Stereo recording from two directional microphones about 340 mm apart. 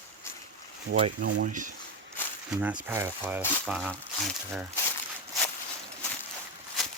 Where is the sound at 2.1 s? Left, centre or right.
Centre.